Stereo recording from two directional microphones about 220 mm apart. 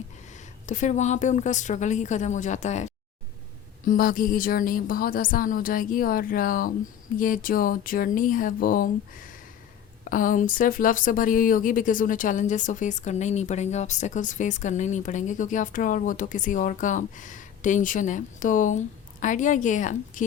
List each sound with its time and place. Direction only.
0.7 s speech: 35° left (ahead or behind)